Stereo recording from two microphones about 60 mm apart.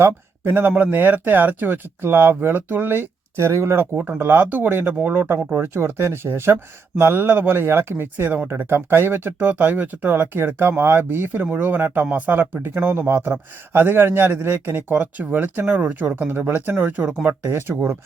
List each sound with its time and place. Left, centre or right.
0.0 s a man's voice: right
3.3 s speech: right
4.2 s a man's voice: right